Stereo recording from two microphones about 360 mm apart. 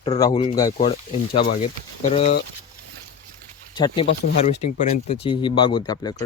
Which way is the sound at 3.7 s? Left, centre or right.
Centre.